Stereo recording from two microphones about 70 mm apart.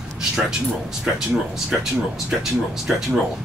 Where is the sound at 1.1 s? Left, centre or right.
Centre.